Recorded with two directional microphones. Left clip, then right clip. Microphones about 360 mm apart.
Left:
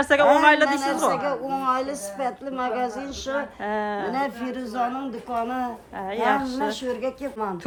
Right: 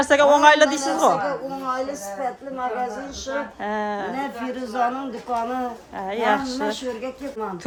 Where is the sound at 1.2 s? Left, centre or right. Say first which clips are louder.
Left 1 dB; left.